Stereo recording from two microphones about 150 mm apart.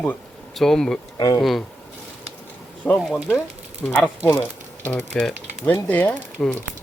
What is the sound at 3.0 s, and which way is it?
Speech, centre (ahead or behind).